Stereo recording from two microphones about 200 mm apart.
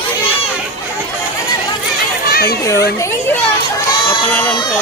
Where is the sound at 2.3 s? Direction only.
50° left (ahead or behind).